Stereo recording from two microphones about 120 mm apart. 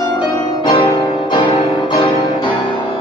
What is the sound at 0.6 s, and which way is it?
Music, 45° left (ahead or behind).